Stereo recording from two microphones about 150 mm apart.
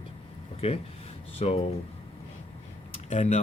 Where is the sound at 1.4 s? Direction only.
40° left (ahead or behind).